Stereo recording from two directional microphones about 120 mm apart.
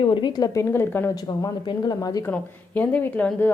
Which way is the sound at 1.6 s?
35° left (ahead or behind).